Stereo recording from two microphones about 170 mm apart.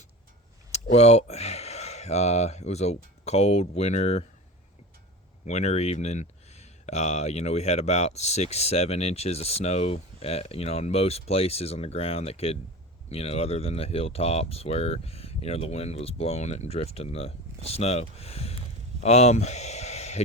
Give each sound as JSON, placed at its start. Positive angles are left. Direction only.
{"t": 0.7, "sound": "speech", "side_deg": 40}
{"t": 5.5, "sound": "speech", "side_deg": 40}